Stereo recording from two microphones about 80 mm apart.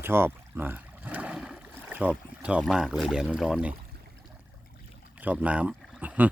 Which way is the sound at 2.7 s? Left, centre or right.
Centre.